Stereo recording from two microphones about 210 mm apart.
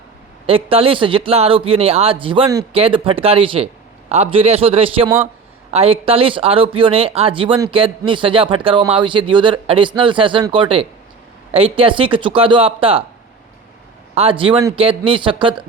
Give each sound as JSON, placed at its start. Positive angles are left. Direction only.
{"t": 0.4, "sound": "speech", "side_deg": -25}
{"t": 14.2, "sound": "speech", "side_deg": -25}